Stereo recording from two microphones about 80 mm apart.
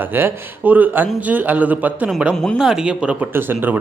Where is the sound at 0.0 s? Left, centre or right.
Right.